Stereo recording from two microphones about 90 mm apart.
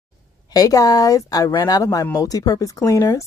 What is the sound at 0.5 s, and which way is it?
Speech, 45° left (ahead or behind).